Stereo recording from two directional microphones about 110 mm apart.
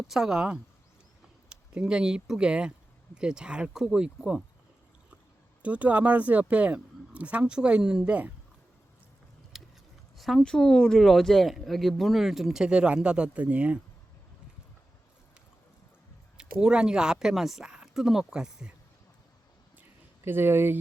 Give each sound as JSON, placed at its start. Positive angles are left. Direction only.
{"t": 0.1, "sound": "speech", "side_deg": -5}
{"t": 5.6, "sound": "speech", "side_deg": -15}
{"t": 9.5, "sound": "a sound", "side_deg": 0}
{"t": 10.2, "sound": "speech", "side_deg": 0}
{"t": 16.4, "sound": "speech", "side_deg": -5}
{"t": 20.2, "sound": "speech", "side_deg": -20}